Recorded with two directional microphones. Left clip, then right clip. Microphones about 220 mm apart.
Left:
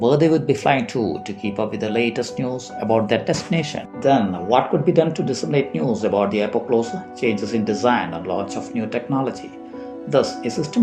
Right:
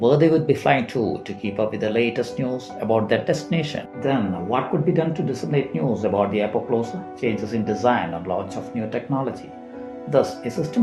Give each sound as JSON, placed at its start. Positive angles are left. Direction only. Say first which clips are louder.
{"t": 0.0, "sound": "speech", "louder": "even", "side_deg": 25}